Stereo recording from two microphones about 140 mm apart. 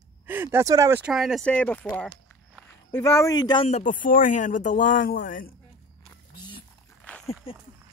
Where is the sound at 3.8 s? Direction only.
75° left (ahead or behind).